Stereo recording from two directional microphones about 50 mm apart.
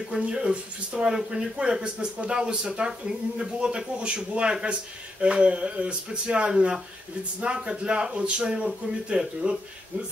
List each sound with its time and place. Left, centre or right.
0.1 s speech: centre